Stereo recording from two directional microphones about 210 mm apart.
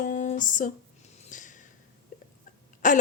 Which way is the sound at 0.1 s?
35° left (ahead or behind).